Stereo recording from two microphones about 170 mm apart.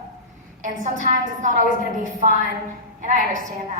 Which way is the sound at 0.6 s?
45° right (ahead or behind).